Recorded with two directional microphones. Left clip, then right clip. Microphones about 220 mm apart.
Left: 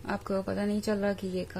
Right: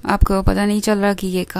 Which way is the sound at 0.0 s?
40° right (ahead or behind).